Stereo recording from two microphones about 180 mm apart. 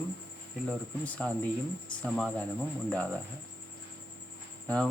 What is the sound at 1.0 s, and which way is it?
Speech, 10° left (ahead or behind).